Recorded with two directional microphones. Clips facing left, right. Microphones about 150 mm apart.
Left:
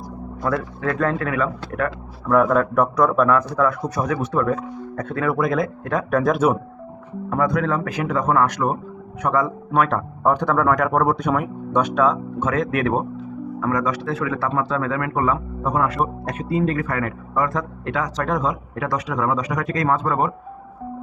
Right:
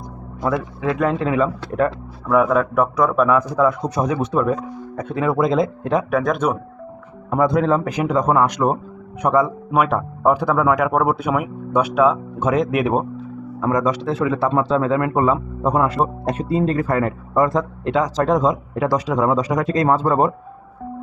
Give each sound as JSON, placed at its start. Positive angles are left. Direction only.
{"t": 0.4, "sound": "a man's voice", "side_deg": -15}
{"t": 2.2, "sound": "a man's voice", "side_deg": -5}
{"t": 3.3, "sound": "a man's voice", "side_deg": -15}
{"t": 6.1, "sound": "a man's voice", "side_deg": 0}
{"t": 7.3, "sound": "a man's voice", "side_deg": -20}